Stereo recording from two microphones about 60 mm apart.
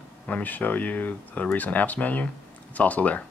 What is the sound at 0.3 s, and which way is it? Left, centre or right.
Speech, left.